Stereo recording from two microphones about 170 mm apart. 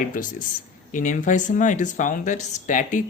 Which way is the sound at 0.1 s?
50° left (ahead or behind).